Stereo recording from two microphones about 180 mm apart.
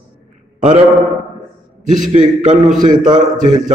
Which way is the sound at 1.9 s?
45° right (ahead or behind).